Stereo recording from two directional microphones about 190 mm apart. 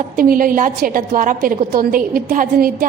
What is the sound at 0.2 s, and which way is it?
A woman's voice, 45° right (ahead or behind).